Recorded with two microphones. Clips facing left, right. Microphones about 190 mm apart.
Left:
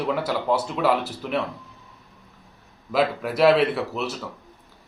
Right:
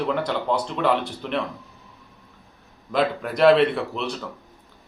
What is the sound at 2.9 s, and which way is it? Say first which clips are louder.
Speech: even; 5° left (ahead or behind).